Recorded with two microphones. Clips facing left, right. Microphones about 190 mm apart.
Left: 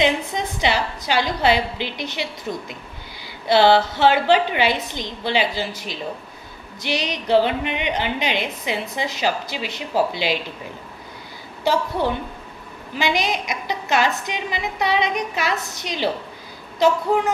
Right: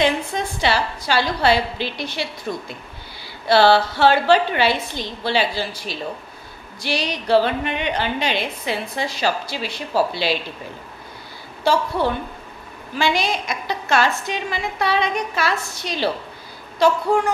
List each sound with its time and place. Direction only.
0.3 s a woman's voice: 20° left (ahead or behind)
11.6 s a woman's voice: 15° left (ahead or behind)